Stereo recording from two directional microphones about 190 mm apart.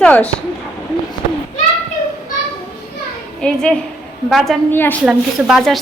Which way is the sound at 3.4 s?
5° left (ahead or behind).